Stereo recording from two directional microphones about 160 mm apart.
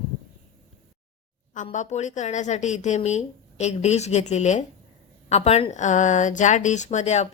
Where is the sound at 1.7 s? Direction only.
50° left (ahead or behind).